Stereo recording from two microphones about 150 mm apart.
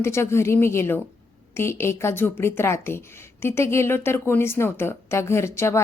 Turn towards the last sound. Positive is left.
turn(degrees=20)  # may be behind; listen again after turning